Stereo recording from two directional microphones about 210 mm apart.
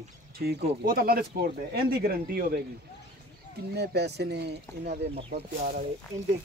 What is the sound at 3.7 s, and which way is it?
Speech, 50° right (ahead or behind).